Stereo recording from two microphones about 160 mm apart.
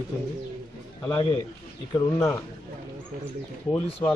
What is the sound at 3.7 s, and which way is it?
Speech, 5° left (ahead or behind).